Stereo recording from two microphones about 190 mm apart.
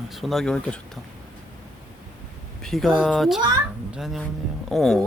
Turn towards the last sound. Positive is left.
turn(degrees=0)  # may be behind; listen again after turning